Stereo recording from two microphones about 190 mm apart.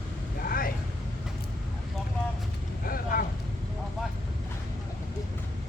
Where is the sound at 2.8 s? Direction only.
50° left (ahead or behind).